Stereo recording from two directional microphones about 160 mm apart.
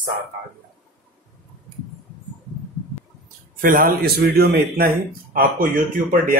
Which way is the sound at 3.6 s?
65° right (ahead or behind).